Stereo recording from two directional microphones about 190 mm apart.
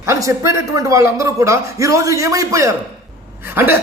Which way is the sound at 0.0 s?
15° right (ahead or behind).